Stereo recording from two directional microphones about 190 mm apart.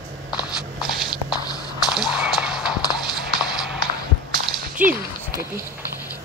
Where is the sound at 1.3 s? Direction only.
20° left (ahead or behind).